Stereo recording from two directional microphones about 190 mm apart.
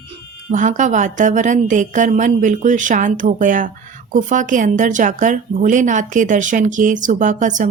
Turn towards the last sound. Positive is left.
turn(degrees=-40)  # may be behind; listen again after turning